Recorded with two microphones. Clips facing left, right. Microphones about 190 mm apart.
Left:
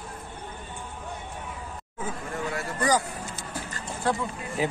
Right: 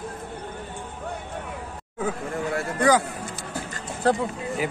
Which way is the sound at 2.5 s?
60° right (ahead or behind).